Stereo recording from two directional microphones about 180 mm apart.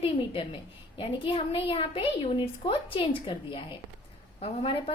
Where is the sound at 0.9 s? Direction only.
30° left (ahead or behind).